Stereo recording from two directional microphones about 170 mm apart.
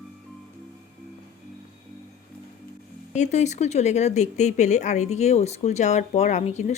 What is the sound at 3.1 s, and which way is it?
Speech, 45° left (ahead or behind).